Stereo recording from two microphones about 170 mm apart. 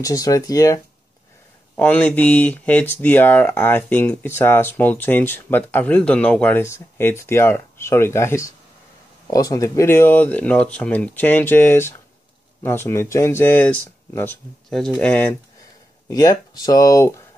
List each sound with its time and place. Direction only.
0.0 s speech: 20° left (ahead or behind)
1.8 s speech: 10° left (ahead or behind)
16.1 s speech: 20° left (ahead or behind)